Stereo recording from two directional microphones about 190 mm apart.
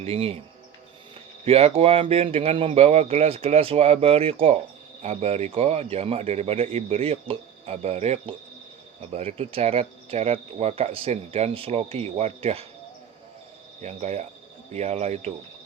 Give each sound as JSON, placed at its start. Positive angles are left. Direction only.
{"t": 0.0, "sound": "speech", "side_deg": -30}
{"t": 1.5, "sound": "speech", "side_deg": -30}
{"t": 13.8, "sound": "speech", "side_deg": -35}